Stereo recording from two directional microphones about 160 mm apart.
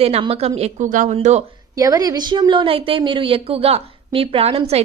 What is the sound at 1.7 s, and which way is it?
A woman's voice, 20° right (ahead or behind).